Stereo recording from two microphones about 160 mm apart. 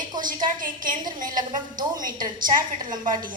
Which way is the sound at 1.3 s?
25° right (ahead or behind).